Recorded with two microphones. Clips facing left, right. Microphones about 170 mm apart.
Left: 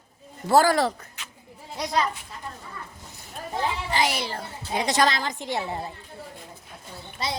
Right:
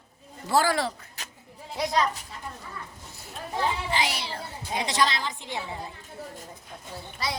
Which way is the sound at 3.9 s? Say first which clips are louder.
Left 3 dB; 45° left (ahead or behind).